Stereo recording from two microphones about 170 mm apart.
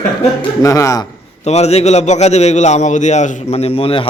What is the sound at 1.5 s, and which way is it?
A man's voice, 40° left (ahead or behind).